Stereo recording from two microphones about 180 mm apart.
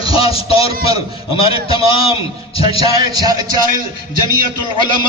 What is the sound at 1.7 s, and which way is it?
Speech, 30° left (ahead or behind).